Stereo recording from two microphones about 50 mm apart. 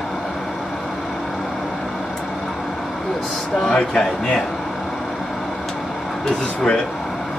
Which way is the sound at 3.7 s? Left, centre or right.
Centre.